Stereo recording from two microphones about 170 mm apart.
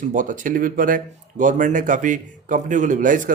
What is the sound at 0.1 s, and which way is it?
Speech, 50° right (ahead or behind).